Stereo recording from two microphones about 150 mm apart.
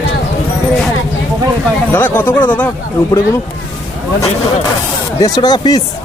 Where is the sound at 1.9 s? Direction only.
15° left (ahead or behind).